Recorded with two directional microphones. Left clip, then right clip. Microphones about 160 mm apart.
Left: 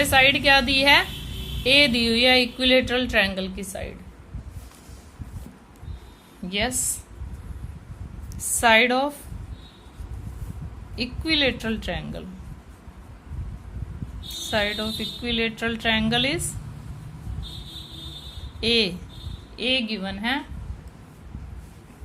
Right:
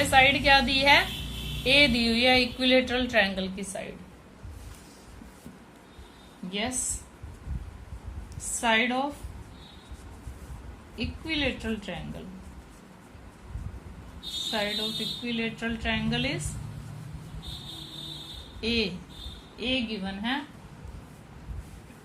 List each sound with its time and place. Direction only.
0.0 s speech: 40° left (ahead or behind)
8.6 s speech: 65° left (ahead or behind)
10.9 s speech: 60° left (ahead or behind)
14.5 s speech: 60° left (ahead or behind)
18.6 s speech: 55° left (ahead or behind)